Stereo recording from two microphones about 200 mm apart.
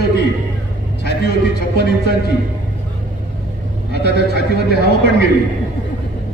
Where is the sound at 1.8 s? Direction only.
55° left (ahead or behind).